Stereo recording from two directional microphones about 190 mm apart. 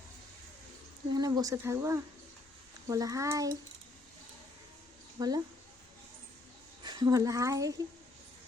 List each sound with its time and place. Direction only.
1.1 s speech: 20° right (ahead or behind)
5.2 s speech: 20° right (ahead or behind)
6.8 s speech: 25° right (ahead or behind)